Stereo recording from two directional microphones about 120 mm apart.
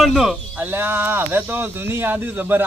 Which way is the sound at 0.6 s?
15° right (ahead or behind).